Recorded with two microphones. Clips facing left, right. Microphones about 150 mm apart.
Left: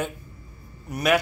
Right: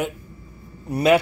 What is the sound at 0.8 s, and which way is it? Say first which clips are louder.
Speech: right 6 dB; 30° right (ahead or behind).